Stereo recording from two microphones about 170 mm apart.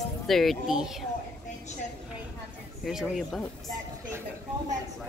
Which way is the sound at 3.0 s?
10° left (ahead or behind).